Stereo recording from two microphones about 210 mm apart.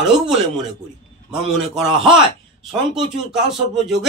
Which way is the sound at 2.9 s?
Centre (ahead or behind).